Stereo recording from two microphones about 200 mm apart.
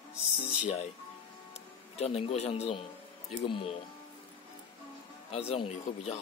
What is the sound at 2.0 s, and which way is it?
Speech, 30° left (ahead or behind).